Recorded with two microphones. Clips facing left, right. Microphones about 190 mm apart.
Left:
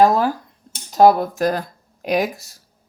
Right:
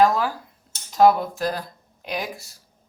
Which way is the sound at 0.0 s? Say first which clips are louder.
Left 4 dB; 40° left (ahead or behind).